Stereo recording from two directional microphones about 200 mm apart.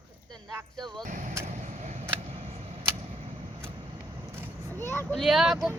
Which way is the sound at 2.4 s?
30° right (ahead or behind).